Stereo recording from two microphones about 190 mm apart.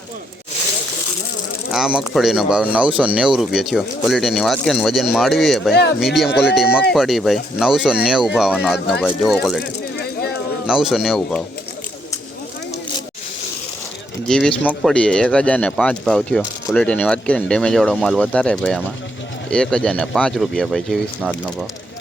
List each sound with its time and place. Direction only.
1.7 s speech: 5° right (ahead or behind)
10.0 s a sound: 55° left (ahead or behind)
10.7 s speech: centre (ahead or behind)
14.3 s speech: centre (ahead or behind)